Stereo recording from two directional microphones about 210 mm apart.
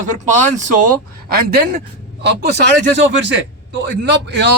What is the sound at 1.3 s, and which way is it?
Speech, 45° right (ahead or behind).